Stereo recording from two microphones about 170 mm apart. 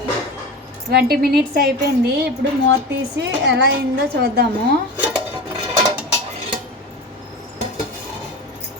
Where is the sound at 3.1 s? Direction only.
85° right.